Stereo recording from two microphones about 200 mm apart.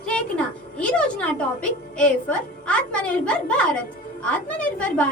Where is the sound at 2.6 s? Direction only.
5° left (ahead or behind).